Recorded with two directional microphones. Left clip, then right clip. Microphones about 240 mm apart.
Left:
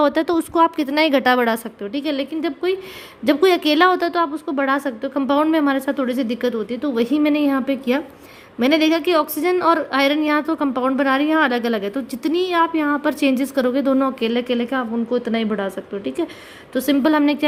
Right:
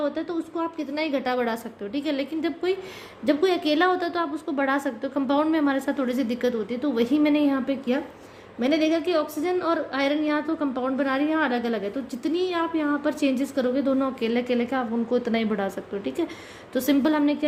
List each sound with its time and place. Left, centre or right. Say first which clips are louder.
0.0 s a woman's voice: left 10 dB; left